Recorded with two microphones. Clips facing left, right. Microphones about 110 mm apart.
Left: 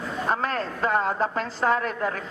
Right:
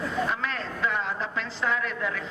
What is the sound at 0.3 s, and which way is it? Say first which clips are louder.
A woman's voice: left 5 dB; 45° left (ahead or behind).